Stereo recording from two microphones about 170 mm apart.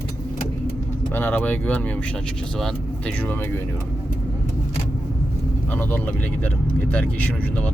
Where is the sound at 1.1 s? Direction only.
10° left (ahead or behind).